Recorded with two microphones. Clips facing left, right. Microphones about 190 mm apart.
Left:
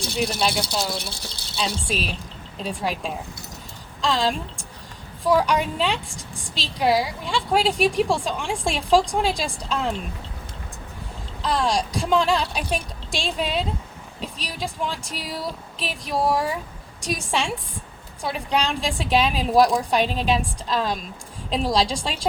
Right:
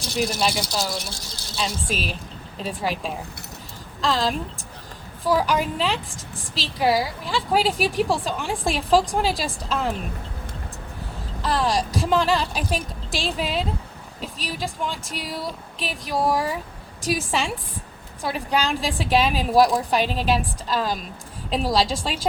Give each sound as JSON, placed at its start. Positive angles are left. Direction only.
{"t": 1.1, "sound": "speech", "side_deg": 60}
{"t": 1.5, "sound": "a woman's voice", "side_deg": 0}
{"t": 11.4, "sound": "a woman's voice", "side_deg": 0}